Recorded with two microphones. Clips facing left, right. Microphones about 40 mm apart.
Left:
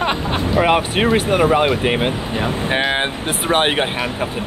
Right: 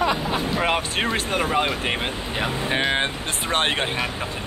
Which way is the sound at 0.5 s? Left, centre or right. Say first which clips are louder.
Left 10 dB; centre.